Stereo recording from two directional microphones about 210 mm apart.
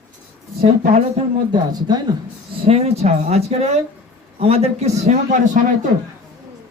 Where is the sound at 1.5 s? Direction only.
20° right (ahead or behind).